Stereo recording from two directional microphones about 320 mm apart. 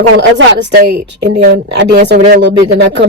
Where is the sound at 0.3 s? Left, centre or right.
Right.